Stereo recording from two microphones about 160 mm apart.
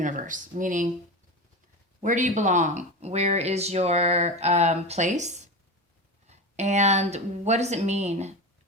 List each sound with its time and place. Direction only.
0.0 s speech: 50° right (ahead or behind)
2.0 s speech: 50° right (ahead or behind)